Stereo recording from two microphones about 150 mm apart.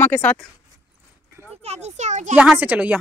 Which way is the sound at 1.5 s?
45° right (ahead or behind).